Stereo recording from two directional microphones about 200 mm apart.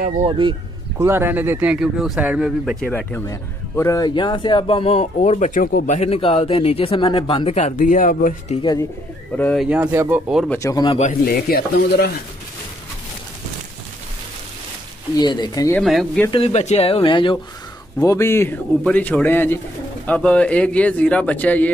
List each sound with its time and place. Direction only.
0.2 s speech: 25° right (ahead or behind)
0.9 s speech: 10° right (ahead or behind)
2.9 s speech: 10° left (ahead or behind); by 5.9 s 45° left (ahead or behind)
5.9 s speech: 30° left (ahead or behind)
9.4 s speech: 5° left (ahead or behind)
9.7 s speech: 10° right (ahead or behind)
10.5 s speech: 15° left (ahead or behind)
11.0 s speech: 45° left (ahead or behind)
15.1 s speech: 20° left (ahead or behind)
15.7 s speech: centre (ahead or behind)
16.3 s speech: 30° left (ahead or behind)
17.9 s a man's voice: 15° left (ahead or behind)